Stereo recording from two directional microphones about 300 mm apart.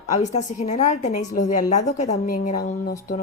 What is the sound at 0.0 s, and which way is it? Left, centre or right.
Speech, left.